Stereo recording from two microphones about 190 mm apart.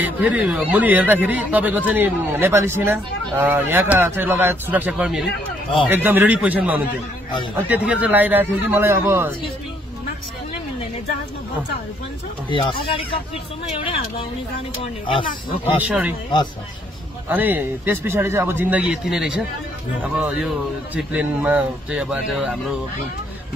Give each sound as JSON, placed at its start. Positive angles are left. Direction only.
{"t": 0.0, "sound": "speech", "side_deg": -5}
{"t": 12.4, "sound": "speech", "side_deg": 25}
{"t": 15.0, "sound": "speech", "side_deg": 25}
{"t": 15.9, "sound": "speech", "side_deg": -5}
{"t": 17.3, "sound": "speech", "side_deg": -10}